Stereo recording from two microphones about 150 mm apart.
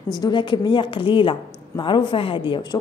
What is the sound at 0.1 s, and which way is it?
A woman's voice, 30° left (ahead or behind).